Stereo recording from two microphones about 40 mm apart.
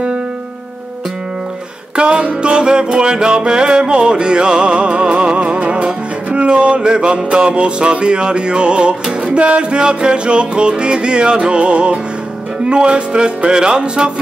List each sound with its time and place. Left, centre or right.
2.0 s music: right